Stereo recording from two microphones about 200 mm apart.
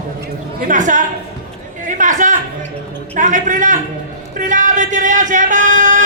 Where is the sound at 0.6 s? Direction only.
40° right (ahead or behind).